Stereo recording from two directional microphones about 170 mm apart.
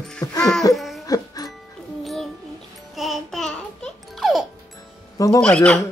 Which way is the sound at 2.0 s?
Centre (ahead or behind).